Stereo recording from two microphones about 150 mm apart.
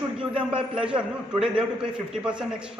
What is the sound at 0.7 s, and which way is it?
Speech, 5° right (ahead or behind).